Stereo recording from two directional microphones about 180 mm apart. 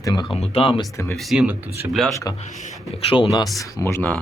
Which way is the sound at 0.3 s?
35° left (ahead or behind).